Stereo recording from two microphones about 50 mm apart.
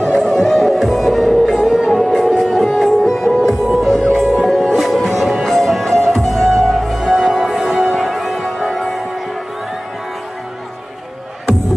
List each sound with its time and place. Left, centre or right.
0.2 s music: centre